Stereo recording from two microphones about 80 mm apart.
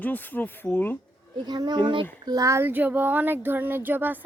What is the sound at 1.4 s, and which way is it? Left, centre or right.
Speech, right.